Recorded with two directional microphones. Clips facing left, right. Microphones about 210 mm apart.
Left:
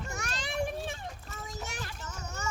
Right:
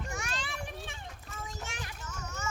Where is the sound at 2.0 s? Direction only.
35° left (ahead or behind).